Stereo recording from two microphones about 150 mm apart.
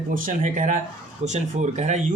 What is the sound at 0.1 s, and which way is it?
Speech, 65° right (ahead or behind).